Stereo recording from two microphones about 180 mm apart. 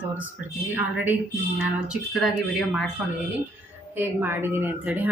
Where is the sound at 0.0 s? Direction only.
10° right (ahead or behind).